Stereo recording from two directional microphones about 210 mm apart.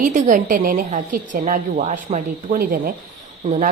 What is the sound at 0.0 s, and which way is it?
A woman's voice, 35° right (ahead or behind).